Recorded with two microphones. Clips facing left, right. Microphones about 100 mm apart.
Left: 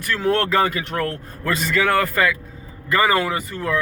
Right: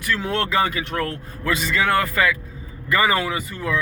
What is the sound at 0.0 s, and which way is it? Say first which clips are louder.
Speech: left 3 dB; 45° left (ahead or behind).